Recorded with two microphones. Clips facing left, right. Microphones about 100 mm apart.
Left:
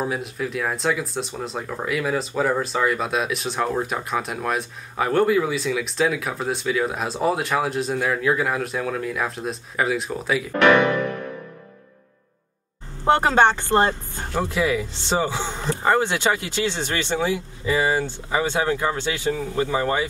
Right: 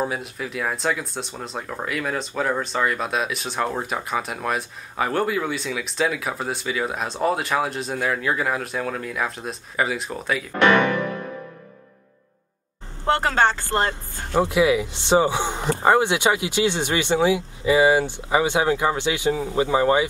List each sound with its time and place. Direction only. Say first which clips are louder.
0.0 s speech: left 1 dB; centre (ahead or behind)
13.0 s speech: left 3 dB; 20° left (ahead or behind)
14.3 s speech: right 4 dB; 15° right (ahead or behind)